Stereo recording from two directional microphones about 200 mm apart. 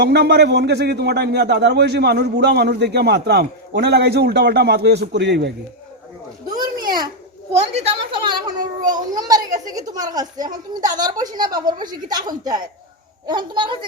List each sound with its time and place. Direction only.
0.0 s a man's voice: 55° right (ahead or behind)
6.7 s a sound: 20° right (ahead or behind)
7.5 s a child's voice: 30° right (ahead or behind)